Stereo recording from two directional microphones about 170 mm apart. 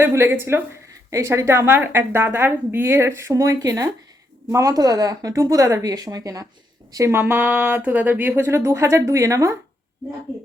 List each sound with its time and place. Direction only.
0.0 s a woman's voice: 15° right (ahead or behind)